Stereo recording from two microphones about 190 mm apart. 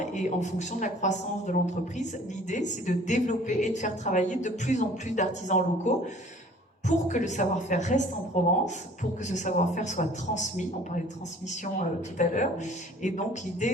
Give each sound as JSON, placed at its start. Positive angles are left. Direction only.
{"t": 0.0, "sound": "speech", "side_deg": 40}
{"t": 12.1, "sound": "speech", "side_deg": 40}